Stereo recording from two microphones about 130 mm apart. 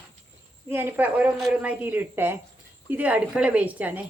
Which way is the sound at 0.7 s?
15° right (ahead or behind).